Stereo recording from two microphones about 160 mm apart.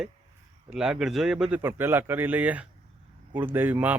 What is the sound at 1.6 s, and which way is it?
Speech, 15° right (ahead or behind).